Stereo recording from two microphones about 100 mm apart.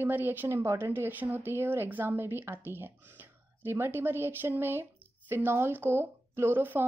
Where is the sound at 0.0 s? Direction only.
20° right (ahead or behind).